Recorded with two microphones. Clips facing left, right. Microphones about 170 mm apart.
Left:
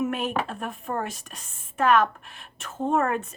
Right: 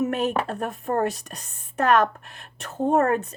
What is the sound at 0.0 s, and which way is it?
Speech, 40° right (ahead or behind).